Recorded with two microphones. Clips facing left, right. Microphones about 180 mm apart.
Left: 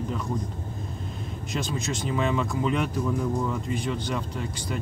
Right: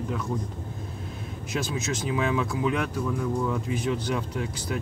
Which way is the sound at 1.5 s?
5° right (ahead or behind).